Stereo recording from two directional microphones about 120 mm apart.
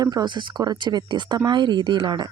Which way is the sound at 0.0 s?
35° right (ahead or behind).